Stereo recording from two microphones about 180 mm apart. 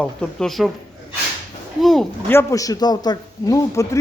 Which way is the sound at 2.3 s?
15° left (ahead or behind).